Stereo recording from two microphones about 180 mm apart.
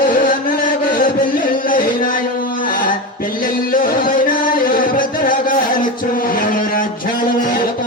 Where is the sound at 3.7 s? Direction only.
50° left (ahead or behind).